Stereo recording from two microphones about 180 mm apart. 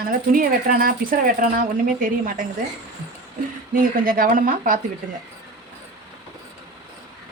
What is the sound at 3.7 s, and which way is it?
Speech, 50° right (ahead or behind).